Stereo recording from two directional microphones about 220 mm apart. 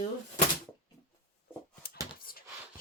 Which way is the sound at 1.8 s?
45° left (ahead or behind).